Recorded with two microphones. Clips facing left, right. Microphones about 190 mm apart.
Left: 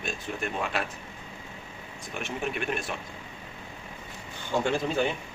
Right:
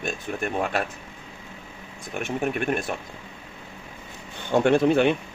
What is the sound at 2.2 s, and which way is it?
Speech, 50° right (ahead or behind).